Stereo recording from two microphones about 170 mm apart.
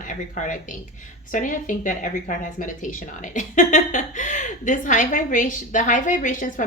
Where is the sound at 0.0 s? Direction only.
50° left (ahead or behind).